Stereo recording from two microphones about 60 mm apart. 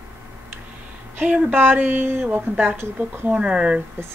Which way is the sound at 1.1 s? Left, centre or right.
Right.